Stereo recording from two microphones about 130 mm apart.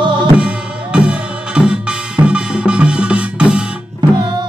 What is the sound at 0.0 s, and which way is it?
Music, 35° right (ahead or behind).